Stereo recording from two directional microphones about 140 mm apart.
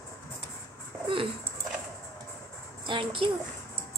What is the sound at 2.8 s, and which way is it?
Speech, 35° right (ahead or behind).